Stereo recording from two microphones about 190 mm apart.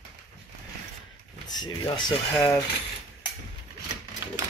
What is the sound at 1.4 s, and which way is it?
Speech, 20° left (ahead or behind).